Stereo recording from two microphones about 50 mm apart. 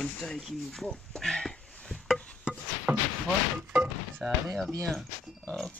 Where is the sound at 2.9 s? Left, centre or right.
Right.